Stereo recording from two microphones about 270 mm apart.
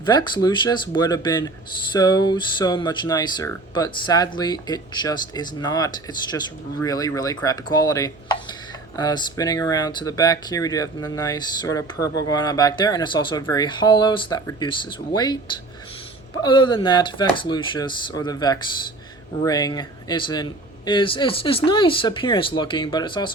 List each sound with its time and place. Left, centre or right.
0.0 s speech: centre
16.4 s speech: centre